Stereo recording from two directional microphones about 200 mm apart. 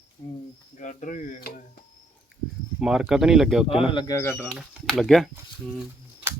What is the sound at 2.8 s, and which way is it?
Speech, 5° right (ahead or behind).